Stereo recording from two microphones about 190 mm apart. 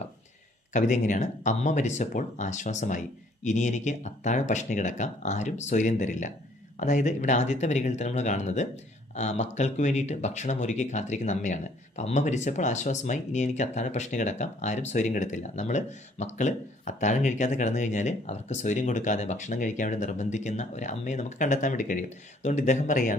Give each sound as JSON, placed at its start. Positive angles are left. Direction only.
{"t": 0.7, "sound": "speech", "side_deg": 40}